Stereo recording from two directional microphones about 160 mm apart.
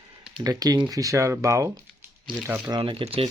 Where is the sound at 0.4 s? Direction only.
25° right (ahead or behind).